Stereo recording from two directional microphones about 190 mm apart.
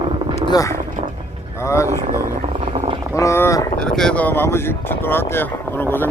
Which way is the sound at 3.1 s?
15° left (ahead or behind).